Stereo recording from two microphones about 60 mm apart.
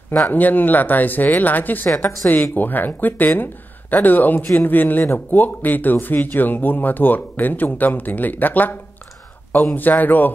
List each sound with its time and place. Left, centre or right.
0.2 s speech: left
9.8 s speech: left